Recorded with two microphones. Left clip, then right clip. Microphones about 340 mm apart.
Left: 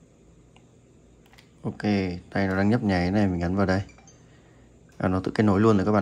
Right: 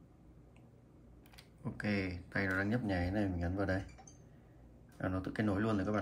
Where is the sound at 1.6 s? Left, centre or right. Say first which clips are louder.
Left 11 dB; centre.